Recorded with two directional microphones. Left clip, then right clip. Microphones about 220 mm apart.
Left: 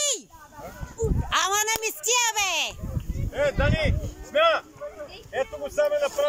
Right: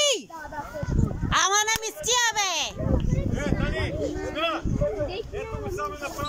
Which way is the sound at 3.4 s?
40° left (ahead or behind).